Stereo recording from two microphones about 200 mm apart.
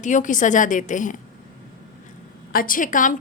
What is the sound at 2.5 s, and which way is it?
Speech, 45° left (ahead or behind).